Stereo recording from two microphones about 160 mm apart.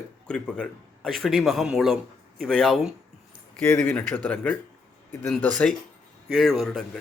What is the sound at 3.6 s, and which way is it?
Speech, 10° left (ahead or behind).